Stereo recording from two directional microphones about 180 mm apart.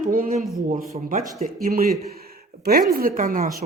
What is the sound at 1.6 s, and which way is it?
A man's voice, 55° right (ahead or behind).